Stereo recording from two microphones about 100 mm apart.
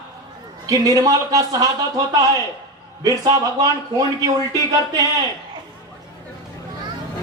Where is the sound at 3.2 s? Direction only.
40° right (ahead or behind).